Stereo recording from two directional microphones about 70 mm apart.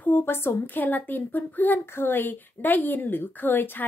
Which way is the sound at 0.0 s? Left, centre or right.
Left.